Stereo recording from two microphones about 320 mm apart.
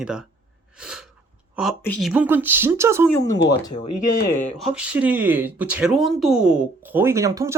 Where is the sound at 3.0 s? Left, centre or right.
Centre.